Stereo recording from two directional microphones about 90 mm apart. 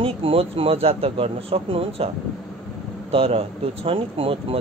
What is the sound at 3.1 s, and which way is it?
Speech, 90° right.